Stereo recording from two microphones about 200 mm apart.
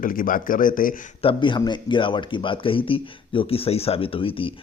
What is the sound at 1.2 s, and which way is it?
Speech, 25° left (ahead or behind).